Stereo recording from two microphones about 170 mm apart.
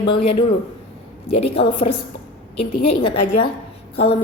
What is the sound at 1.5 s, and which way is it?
Speech, 35° left (ahead or behind).